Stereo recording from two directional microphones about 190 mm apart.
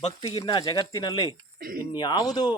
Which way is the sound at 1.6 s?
50° right (ahead or behind).